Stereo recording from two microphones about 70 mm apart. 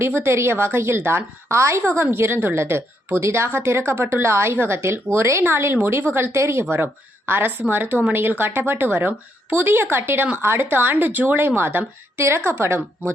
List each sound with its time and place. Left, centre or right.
0.0 s a woman's voice: right